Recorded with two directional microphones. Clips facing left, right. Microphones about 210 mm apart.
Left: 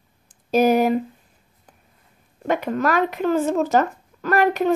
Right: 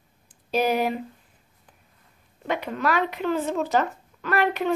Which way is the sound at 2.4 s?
45° left (ahead or behind).